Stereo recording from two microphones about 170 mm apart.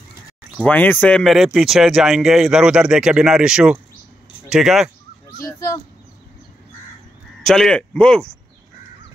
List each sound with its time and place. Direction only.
0.6 s speech: 10° left (ahead or behind)
5.4 s speech: 15° left (ahead or behind)
7.4 s speech: 5° left (ahead or behind)